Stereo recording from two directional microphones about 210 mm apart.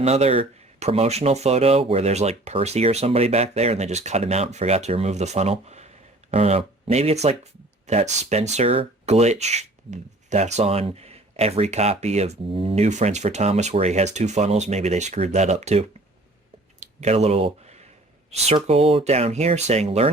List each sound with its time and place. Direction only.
0.0 s speech: 30° right (ahead or behind)